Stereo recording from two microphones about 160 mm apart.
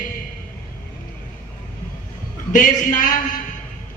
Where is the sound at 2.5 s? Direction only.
55° left (ahead or behind).